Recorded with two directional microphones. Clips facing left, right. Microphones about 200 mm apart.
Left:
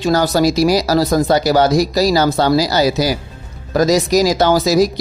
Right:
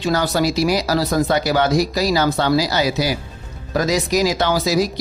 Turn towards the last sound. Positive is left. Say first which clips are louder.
# left 5 dB
turn(degrees=40)  # may be behind; listen again after turning